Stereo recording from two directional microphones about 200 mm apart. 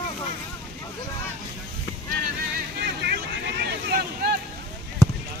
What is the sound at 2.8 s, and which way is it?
Vehicle, 55° right (ahead or behind).